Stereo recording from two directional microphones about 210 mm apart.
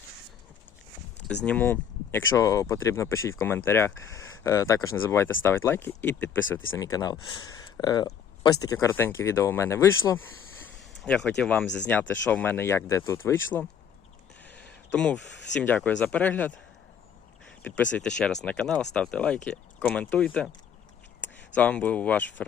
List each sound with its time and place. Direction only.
1.5 s speech: 10° left (ahead or behind)
14.4 s a sound: 55° left (ahead or behind)
14.9 s speech: 5° left (ahead or behind)
17.6 s speech: 5° left (ahead or behind)
21.5 s speech: 5° left (ahead or behind)